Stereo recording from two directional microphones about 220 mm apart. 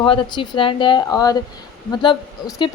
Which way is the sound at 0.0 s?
20° left (ahead or behind).